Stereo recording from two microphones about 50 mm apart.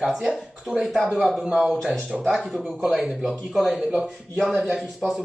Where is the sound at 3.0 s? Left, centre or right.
Centre.